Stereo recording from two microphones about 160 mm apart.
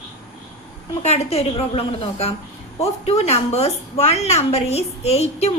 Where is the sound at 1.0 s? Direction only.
40° left (ahead or behind).